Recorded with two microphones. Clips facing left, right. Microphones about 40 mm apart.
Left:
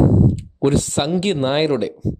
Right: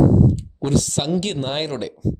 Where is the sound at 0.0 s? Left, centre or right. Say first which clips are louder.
Even; left.